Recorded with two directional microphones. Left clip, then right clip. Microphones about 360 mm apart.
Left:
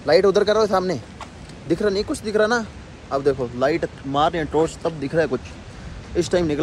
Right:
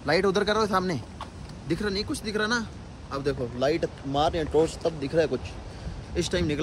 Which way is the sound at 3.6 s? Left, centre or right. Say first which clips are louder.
Left 5 dB; centre.